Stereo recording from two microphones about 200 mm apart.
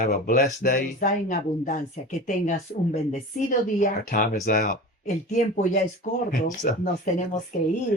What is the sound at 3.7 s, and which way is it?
Speech, 45° left (ahead or behind).